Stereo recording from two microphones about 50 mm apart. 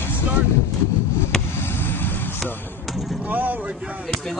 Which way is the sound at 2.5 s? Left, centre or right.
Left.